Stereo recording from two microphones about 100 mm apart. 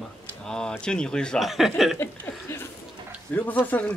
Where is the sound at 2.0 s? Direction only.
25° left (ahead or behind).